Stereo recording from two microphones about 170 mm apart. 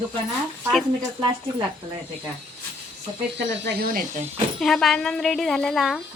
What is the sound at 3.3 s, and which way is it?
Speech, 75° right (ahead or behind).